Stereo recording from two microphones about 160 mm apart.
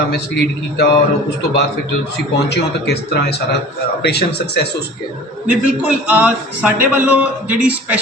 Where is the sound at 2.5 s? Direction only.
90° left.